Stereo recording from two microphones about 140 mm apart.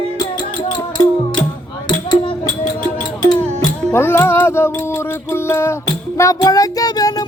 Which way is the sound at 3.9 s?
15° left (ahead or behind).